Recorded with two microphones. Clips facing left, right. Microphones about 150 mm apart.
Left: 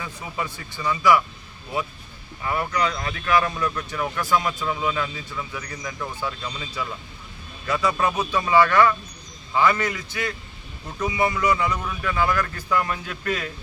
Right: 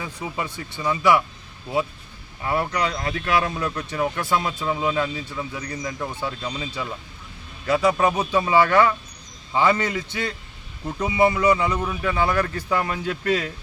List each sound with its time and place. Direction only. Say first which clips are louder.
0.0 s speech: right 1 dB; 20° right (ahead or behind)
2.5 s speech: right 1 dB; 30° right (ahead or behind)